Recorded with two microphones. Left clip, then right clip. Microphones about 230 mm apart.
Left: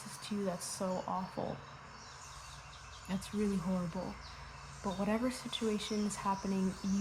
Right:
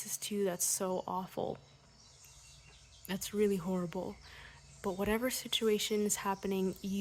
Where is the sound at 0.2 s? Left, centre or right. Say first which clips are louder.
Right 4 dB; right.